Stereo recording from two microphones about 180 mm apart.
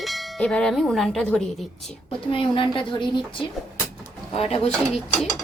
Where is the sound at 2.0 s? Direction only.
30° left (ahead or behind).